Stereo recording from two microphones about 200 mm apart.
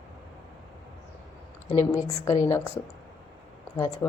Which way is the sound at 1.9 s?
20° left (ahead or behind).